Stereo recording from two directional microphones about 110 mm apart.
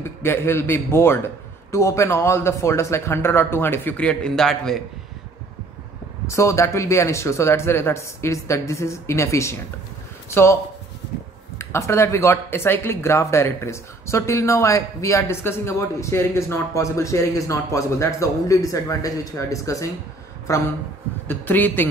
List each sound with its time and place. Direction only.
0.2 s speech: 20° left (ahead or behind); by 4.8 s 5° left (ahead or behind)
6.2 s speech: 25° left (ahead or behind)
21.3 s a man's voice: 15° left (ahead or behind)